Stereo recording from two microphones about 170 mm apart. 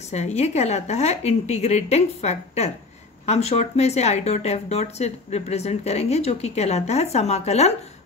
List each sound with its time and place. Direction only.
0.1 s speech: 40° left (ahead or behind)